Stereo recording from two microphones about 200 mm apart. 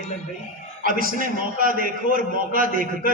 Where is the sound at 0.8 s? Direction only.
45° right (ahead or behind).